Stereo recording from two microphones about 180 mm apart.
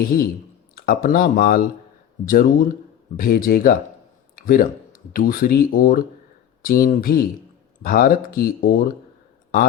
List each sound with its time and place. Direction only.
0.0 s a man's voice: 55° left (ahead or behind)